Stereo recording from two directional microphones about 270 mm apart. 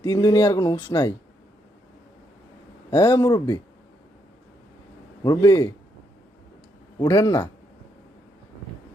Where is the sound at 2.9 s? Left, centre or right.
Centre.